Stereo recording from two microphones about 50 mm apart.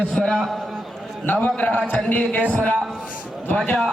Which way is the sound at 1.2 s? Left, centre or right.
Left.